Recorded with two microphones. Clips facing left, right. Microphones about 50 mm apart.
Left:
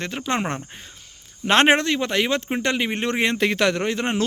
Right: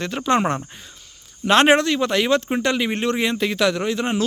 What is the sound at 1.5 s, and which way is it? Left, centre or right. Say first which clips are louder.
Speech: right 2 dB; left.